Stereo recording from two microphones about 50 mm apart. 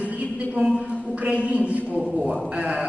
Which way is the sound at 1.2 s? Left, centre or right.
Right.